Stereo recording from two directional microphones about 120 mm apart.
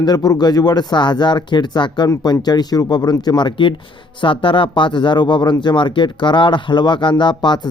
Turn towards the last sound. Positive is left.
turn(degrees=40)  # may be behind; listen again after turning